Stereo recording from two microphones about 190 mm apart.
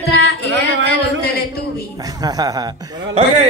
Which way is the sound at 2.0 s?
20° right (ahead or behind).